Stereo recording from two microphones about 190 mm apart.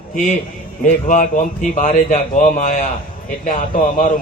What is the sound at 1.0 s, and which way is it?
A man's voice, 45° left (ahead or behind).